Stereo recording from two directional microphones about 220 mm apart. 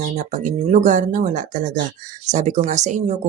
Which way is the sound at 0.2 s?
35° right (ahead or behind).